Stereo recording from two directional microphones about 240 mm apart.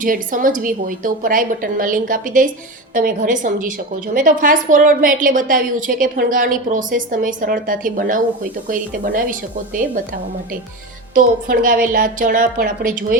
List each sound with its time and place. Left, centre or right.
0.0 s a woman's voice: right
11.1 s a woman's voice: right